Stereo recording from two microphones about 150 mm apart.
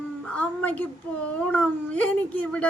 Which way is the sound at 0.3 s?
10° left (ahead or behind).